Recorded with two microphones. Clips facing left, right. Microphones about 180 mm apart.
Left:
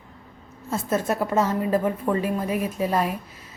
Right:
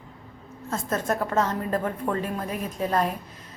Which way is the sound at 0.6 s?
10° left (ahead or behind).